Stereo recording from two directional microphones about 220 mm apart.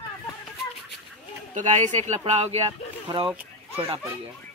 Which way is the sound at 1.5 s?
35° right (ahead or behind).